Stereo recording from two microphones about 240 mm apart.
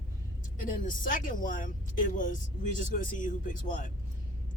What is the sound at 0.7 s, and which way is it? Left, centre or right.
Speech, left.